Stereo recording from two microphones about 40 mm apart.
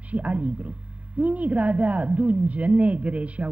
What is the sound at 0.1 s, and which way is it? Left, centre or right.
A woman's voice, right.